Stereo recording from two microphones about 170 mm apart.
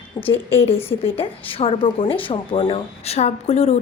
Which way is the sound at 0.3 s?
35° left (ahead or behind).